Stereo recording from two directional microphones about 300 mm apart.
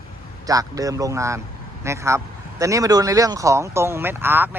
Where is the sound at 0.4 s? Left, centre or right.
Centre.